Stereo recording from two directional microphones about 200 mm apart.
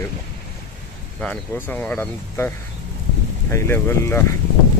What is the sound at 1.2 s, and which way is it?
Speech, 5° left (ahead or behind).